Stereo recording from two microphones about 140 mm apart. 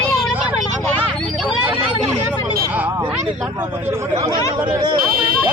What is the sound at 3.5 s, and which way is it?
Speech, 15° right (ahead or behind).